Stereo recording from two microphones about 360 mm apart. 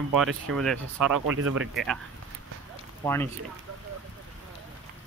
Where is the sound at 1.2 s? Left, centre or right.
Right.